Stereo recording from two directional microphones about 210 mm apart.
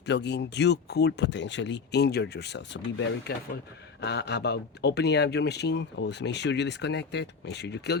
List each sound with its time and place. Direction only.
0.0 s speech: 55° left (ahead or behind)